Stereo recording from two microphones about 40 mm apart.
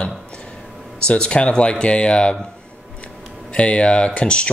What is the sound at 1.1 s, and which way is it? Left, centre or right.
Speech, left.